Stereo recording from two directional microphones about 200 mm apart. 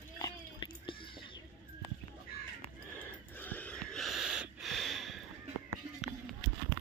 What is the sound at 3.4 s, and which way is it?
Wheeze, 10° left (ahead or behind).